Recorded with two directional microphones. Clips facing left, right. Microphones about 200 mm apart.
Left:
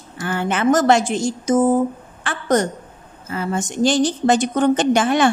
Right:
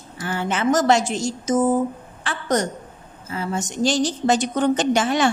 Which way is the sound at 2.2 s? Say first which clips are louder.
Left 4 dB; 55° left (ahead or behind).